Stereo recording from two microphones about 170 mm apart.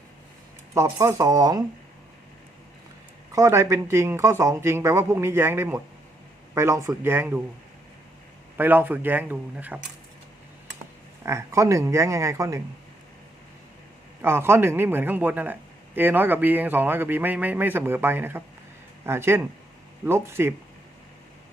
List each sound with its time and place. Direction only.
0.7 s speech: 20° right (ahead or behind)
3.3 s speech: 15° right (ahead or behind)
8.5 s speech: 10° right (ahead or behind)
11.3 s speech: 15° right (ahead or behind)
14.2 s speech: 15° right (ahead or behind)